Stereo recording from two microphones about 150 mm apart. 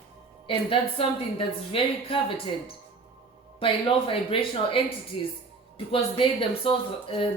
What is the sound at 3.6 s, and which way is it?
Speech, 35° left (ahead or behind).